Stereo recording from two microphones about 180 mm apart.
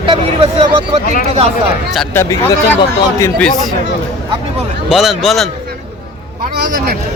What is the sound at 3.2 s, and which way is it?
Speech, 10° left (ahead or behind).